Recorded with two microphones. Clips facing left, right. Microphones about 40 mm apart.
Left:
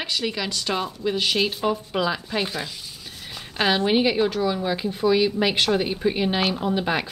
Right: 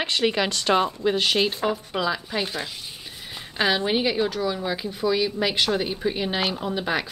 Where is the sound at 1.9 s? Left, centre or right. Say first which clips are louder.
Left 1 dB; centre.